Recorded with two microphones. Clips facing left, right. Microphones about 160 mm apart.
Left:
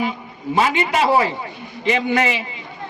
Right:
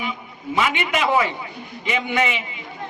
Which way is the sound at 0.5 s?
35° left (ahead or behind).